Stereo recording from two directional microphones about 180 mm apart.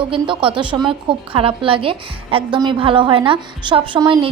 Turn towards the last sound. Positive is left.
turn(degrees=-25)  # may be behind; listen again after turning